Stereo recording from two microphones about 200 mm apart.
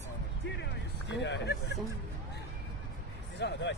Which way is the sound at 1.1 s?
60° left (ahead or behind).